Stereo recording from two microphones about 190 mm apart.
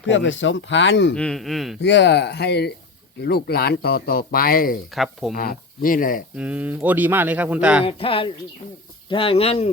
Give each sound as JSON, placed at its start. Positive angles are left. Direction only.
{"t": 0.1, "sound": "speech", "side_deg": 75}
{"t": 1.1, "sound": "speech", "side_deg": 5}
{"t": 1.8, "sound": "speech", "side_deg": 65}
{"t": 4.9, "sound": "speech", "side_deg": 0}
{"t": 5.3, "sound": "speech", "side_deg": 50}
{"t": 6.3, "sound": "speech", "side_deg": -5}
{"t": 7.9, "sound": "speech", "side_deg": 30}